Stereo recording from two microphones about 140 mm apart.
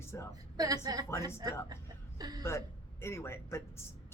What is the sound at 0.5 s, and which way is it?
A woman's voice, 25° right (ahead or behind).